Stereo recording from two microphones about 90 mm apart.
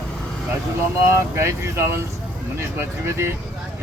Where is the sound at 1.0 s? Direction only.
30° right (ahead or behind).